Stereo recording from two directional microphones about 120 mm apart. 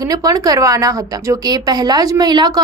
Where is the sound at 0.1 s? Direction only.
30° right (ahead or behind).